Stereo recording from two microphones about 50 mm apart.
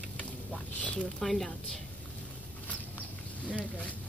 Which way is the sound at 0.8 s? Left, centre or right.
Centre.